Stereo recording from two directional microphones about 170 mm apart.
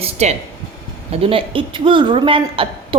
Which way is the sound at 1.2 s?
30° right (ahead or behind).